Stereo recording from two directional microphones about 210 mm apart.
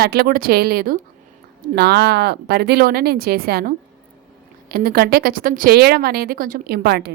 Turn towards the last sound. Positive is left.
turn(degrees=-50)  # may be behind; listen again after turning